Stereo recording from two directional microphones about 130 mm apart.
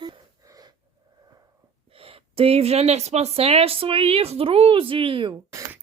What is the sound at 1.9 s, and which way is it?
Speech, 45° right (ahead or behind).